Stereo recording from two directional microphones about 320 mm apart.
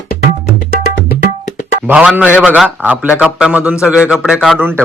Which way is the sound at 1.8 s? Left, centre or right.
Centre.